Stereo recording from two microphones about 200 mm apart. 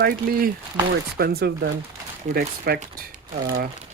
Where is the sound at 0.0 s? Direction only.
50° right (ahead or behind).